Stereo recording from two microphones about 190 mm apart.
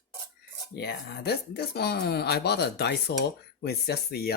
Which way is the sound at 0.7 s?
60° left (ahead or behind).